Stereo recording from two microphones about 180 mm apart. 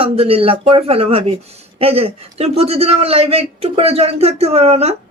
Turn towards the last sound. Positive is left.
turn(degrees=-35)  # may be behind; listen again after turning